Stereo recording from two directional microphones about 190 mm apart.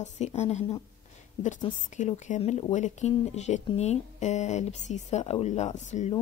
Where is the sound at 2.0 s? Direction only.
35° left (ahead or behind).